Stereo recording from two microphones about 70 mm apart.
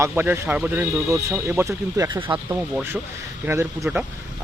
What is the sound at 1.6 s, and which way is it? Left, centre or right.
Speech, right.